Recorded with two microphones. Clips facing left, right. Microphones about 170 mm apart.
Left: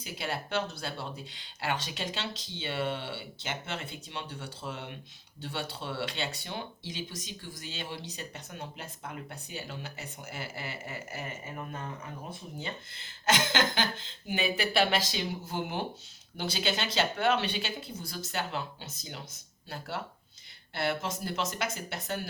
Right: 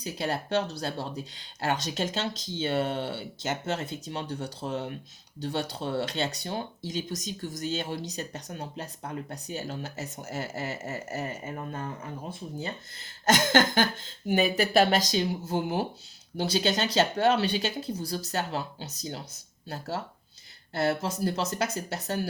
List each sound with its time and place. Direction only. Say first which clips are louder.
0.0 s speech: right 5 dB; 40° right (ahead or behind)
12.5 s speech: right 4 dB; 40° right (ahead or behind)
20.7 s speech: right 5 dB; 40° right (ahead or behind)